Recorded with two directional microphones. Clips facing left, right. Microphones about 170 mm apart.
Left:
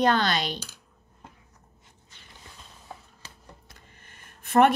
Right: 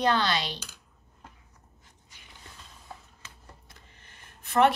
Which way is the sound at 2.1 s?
10° right (ahead or behind).